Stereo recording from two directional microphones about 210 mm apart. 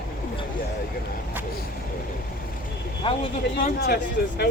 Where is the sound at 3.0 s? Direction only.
25° left (ahead or behind).